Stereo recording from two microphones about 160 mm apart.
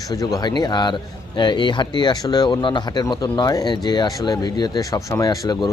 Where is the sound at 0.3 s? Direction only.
25° left (ahead or behind).